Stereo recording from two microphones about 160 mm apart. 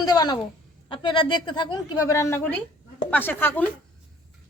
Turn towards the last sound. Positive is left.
turn(degrees=10)  # may be behind; listen again after turning